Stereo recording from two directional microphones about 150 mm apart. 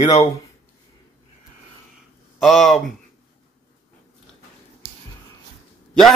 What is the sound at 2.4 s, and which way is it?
Speech, centre (ahead or behind).